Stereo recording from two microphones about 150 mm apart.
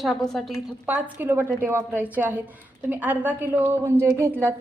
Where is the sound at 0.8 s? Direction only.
10° right (ahead or behind).